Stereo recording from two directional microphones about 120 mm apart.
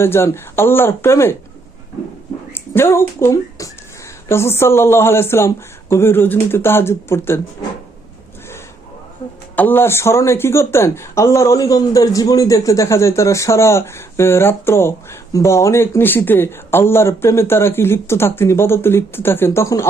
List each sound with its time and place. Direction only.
0.0 s speech: 20° left (ahead or behind)
2.5 s speech: 20° left (ahead or behind)
9.6 s speech: 15° left (ahead or behind)